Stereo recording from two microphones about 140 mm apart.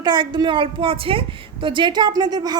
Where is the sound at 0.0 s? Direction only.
35° right (ahead or behind).